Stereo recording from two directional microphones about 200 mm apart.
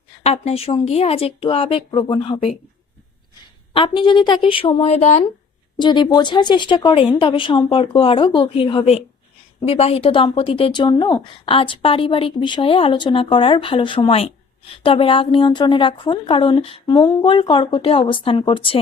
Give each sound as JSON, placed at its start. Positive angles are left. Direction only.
{"t": 0.2, "sound": "speech", "side_deg": 30}
{"t": 3.7, "sound": "speech", "side_deg": 25}
{"t": 5.8, "sound": "speech", "side_deg": 20}